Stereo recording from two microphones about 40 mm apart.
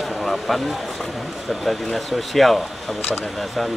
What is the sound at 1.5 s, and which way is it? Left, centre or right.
Speech, centre.